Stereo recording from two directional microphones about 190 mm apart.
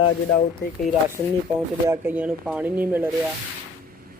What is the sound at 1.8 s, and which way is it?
Speech, 10° right (ahead or behind).